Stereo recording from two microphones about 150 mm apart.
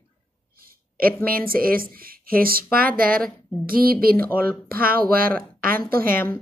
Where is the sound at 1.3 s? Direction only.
75° right (ahead or behind).